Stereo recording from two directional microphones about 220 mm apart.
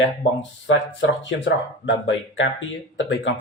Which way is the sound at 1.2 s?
55° left (ahead or behind).